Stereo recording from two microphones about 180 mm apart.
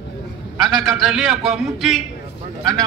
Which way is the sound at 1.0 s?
5° right (ahead or behind).